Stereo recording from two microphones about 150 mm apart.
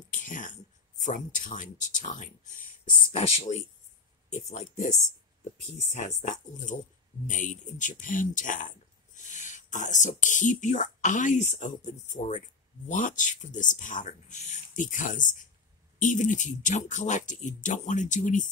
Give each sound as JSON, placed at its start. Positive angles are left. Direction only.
{"t": 0.1, "sound": "speech", "side_deg": 60}
{"t": 5.9, "sound": "speech", "side_deg": 55}